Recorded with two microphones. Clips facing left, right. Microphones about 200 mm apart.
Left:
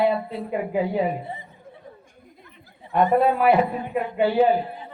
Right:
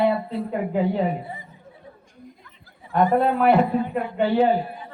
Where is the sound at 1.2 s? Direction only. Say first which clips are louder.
Left 1 dB; 25° left (ahead or behind).